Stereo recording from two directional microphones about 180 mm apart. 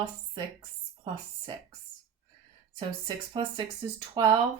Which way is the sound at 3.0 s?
25° right (ahead or behind).